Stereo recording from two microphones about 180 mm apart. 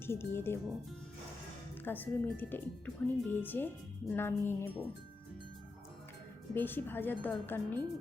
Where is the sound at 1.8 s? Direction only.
10° left (ahead or behind).